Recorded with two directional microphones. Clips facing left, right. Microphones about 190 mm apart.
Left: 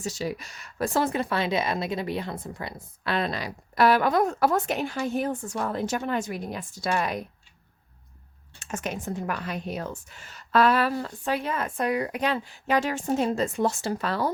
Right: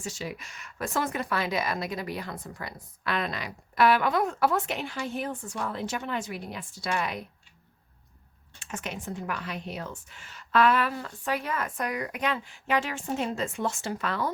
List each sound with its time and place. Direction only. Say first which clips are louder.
0.0 s speech: left 5 dB; 40° left (ahead or behind)
8.5 s speech: left 4 dB; 45° left (ahead or behind)